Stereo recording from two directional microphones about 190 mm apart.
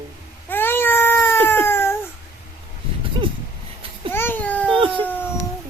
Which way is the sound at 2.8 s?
30° right (ahead or behind).